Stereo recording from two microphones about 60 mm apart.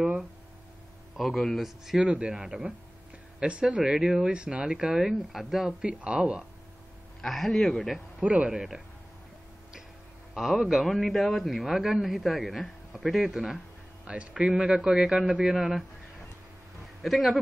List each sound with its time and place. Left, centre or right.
0.0 s a sound: centre
1.1 s a man's voice: centre
2.0 s speech: centre
2.3 s a man's voice: centre
3.3 s speech: centre
5.7 s speech: right
7.2 s a man's voice: centre
8.2 s speech: right
8.5 s a man's voice: centre
10.3 s a man's voice: centre
14.0 s speech: centre
14.8 s speech: centre
17.0 s a man's voice: centre